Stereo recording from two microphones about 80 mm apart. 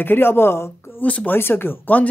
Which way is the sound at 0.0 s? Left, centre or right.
Left.